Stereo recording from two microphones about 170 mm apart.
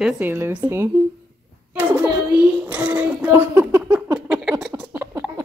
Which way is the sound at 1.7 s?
10° right (ahead or behind).